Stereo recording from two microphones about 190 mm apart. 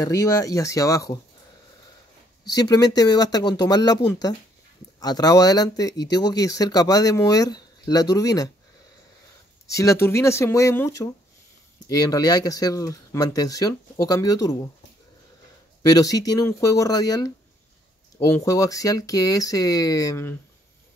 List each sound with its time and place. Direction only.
0.0 s speech: 15° left (ahead or behind)
2.4 s speech: 20° left (ahead or behind)
9.7 s speech: 15° left (ahead or behind)
15.8 s speech: 20° left (ahead or behind)